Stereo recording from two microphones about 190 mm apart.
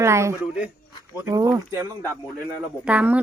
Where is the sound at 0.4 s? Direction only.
5° right (ahead or behind).